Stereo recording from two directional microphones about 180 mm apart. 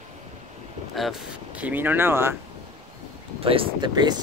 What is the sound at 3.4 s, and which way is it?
Speech, 30° right (ahead or behind).